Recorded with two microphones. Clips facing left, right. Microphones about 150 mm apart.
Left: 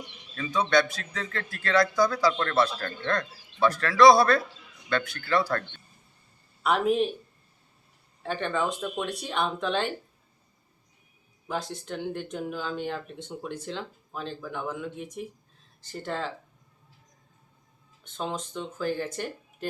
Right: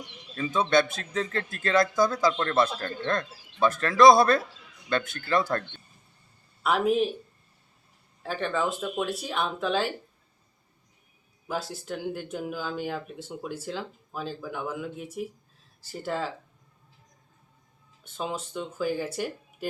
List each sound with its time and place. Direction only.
0.3 s speech: 20° right (ahead or behind)
6.6 s speech: centre (ahead or behind)
8.2 s speech: centre (ahead or behind)
11.4 s speech: 5° right (ahead or behind)
18.0 s speech: 5° right (ahead or behind)